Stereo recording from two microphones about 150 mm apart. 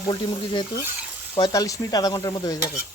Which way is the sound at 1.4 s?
25° left (ahead or behind).